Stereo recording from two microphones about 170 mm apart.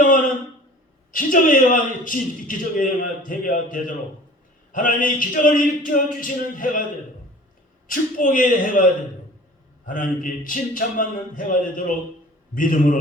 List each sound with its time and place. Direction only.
1.1 s a man's voice: 55° left (ahead or behind)
7.9 s a man's voice: 50° left (ahead or behind)